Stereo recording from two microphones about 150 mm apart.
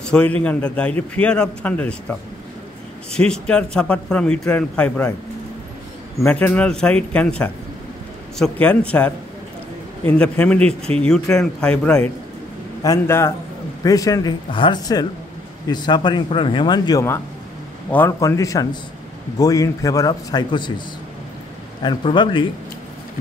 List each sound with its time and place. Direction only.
0.0 s a man's voice: 5° left (ahead or behind)
6.2 s a man's voice: 10° left (ahead or behind)
10.0 s a man's voice: 10° left (ahead or behind)
12.8 s a man's voice: 20° left (ahead or behind)
21.8 s a man's voice: 30° left (ahead or behind)